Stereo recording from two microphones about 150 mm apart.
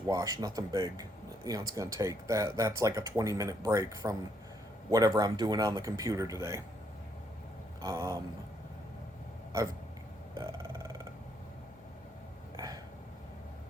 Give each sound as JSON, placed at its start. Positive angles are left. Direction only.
{"t": 0.1, "sound": "speech", "side_deg": -25}
{"t": 7.8, "sound": "speech", "side_deg": -20}
{"t": 10.3, "sound": "burping", "side_deg": -20}
{"t": 12.5, "sound": "a sound", "side_deg": -25}